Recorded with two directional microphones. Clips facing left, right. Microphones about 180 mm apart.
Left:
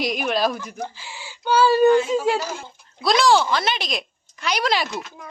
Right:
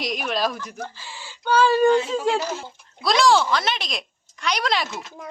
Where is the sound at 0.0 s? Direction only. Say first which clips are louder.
Left 3 dB; centre (ahead or behind).